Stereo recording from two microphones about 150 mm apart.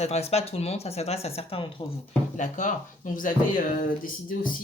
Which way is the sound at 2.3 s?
55° left (ahead or behind).